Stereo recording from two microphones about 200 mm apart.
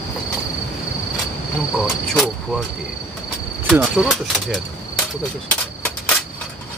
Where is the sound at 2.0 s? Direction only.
Centre (ahead or behind).